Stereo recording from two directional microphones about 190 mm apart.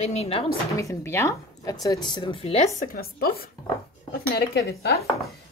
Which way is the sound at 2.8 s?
50° left (ahead or behind).